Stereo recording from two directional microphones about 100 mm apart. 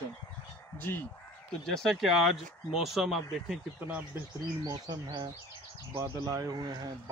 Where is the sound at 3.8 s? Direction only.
20° right (ahead or behind).